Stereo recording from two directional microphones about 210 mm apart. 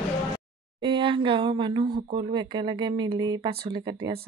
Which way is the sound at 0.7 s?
25° right (ahead or behind).